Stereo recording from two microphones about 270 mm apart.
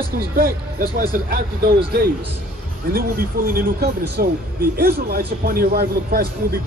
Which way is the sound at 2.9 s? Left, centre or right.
Right.